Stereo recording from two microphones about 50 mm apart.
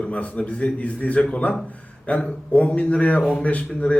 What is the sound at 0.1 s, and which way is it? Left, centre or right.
A man's voice, left.